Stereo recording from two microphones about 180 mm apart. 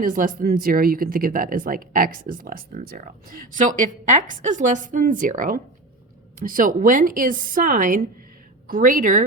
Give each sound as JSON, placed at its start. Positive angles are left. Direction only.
{"t": 0.0, "sound": "speech", "side_deg": -50}